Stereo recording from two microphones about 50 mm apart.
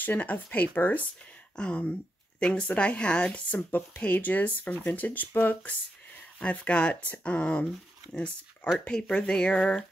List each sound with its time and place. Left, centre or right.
0.0 s speech: left
1.6 s speech: left
3.4 s speech: left
8.7 s speech: centre